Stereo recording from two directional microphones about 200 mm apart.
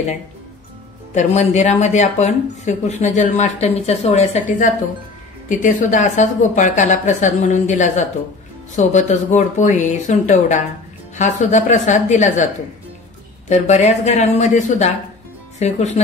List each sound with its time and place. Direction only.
1.1 s speech: 35° left (ahead or behind)
13.5 s speech: 35° left (ahead or behind)